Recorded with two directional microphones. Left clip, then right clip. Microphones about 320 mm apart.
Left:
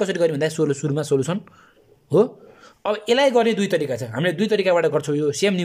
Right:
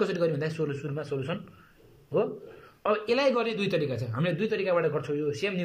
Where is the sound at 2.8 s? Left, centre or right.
Left.